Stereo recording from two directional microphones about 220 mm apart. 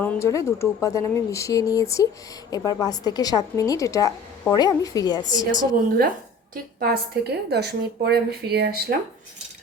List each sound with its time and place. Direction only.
0.0 s a woman's voice: 10° left (ahead or behind)
5.5 s a woman's voice: 40° right (ahead or behind)